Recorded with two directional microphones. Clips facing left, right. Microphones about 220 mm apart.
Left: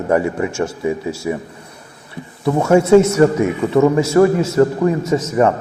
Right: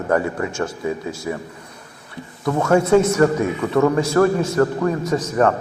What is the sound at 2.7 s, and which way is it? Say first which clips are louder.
A man's voice: left 4 dB; 25° left (ahead or behind).